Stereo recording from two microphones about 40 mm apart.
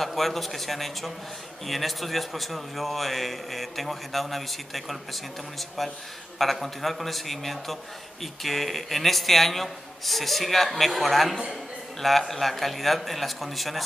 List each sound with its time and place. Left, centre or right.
0.0 s a man's voice: centre